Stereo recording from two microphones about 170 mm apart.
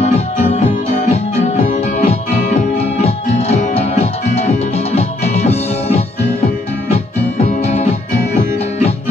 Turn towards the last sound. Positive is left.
turn(degrees=40)  # may be behind; listen again after turning